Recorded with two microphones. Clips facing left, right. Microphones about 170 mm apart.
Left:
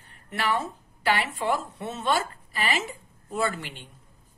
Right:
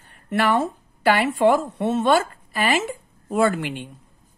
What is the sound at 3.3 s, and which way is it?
Speech, 75° right (ahead or behind).